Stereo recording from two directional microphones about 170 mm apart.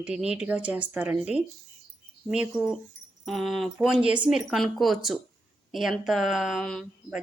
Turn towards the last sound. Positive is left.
turn(degrees=0)  # may be behind; listen again after turning